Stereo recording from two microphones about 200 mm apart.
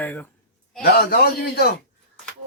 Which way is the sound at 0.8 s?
50° left (ahead or behind).